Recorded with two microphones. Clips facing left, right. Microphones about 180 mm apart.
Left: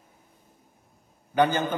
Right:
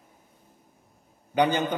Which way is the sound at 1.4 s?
15° right (ahead or behind).